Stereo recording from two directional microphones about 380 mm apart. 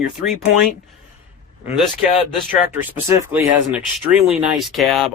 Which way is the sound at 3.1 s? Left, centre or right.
Centre.